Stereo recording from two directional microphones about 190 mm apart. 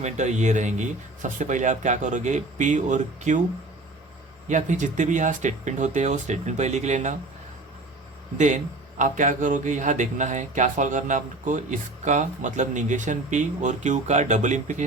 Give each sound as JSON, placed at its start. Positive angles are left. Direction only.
{"t": 0.0, "sound": "speech", "side_deg": -40}
{"t": 4.4, "sound": "speech", "side_deg": -40}
{"t": 8.4, "sound": "speech", "side_deg": -40}